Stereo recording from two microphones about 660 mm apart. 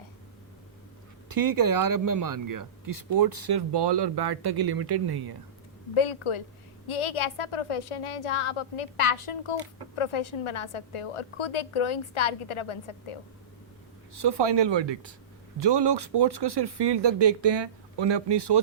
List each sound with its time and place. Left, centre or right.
1.3 s speech: right
5.9 s a woman's voice: left
14.2 s speech: right